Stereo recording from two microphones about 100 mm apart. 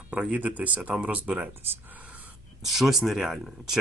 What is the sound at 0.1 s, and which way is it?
Speech, 15° right (ahead or behind).